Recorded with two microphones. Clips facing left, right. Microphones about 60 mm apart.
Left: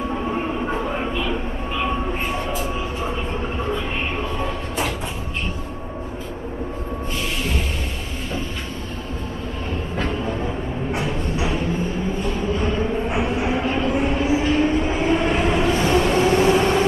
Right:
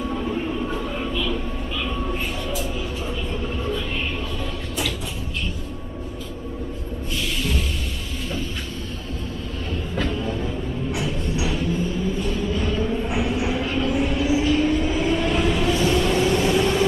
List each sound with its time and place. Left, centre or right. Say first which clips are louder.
0.1 s a sound: left 2 dB; left
4.4 s train: left 4 dB; left
9.9 s music: left 1 dB; left
12.2 s train: left 2 dB; left